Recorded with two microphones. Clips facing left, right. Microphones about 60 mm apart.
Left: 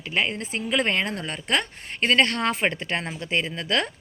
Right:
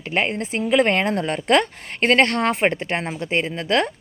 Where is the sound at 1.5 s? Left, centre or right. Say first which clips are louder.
Right 8 dB; right.